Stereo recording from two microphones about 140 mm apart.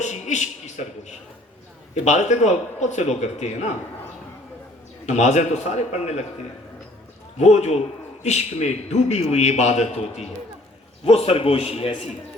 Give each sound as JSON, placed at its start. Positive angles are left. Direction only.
{"t": 0.0, "sound": "a man's voice", "side_deg": 55}
{"t": 5.0, "sound": "a man's voice", "side_deg": 55}
{"t": 7.3, "sound": "a man's voice", "side_deg": 55}